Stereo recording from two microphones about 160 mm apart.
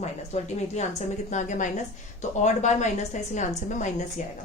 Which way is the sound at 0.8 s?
45° left (ahead or behind).